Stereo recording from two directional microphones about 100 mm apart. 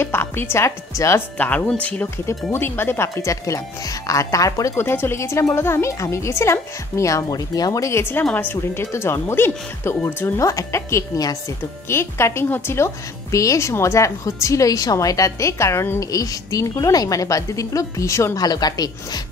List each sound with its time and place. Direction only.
0.0 s a woman's voice: 25° left (ahead or behind)
1.7 s a woman's voice: 15° left (ahead or behind); by 19.2 s 40° left (ahead or behind)